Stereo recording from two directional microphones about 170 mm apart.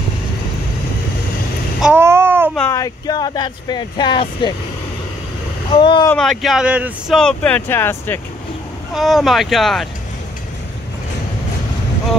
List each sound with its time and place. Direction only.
1.8 s vehicle: 10° right (ahead or behind)
2.7 s speech: 20° left (ahead or behind)
5.7 s speech: 30° left (ahead or behind)
6.1 s speech: 5° left (ahead or behind)
7.2 s speech: 5° left (ahead or behind)
8.9 s speech: centre (ahead or behind)